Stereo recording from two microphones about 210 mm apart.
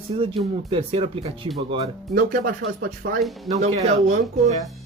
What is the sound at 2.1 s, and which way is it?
Speech, 40° right (ahead or behind).